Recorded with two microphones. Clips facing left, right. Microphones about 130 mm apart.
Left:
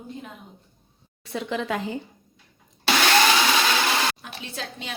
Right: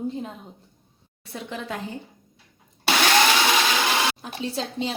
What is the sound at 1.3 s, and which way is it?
Speech, 90° left.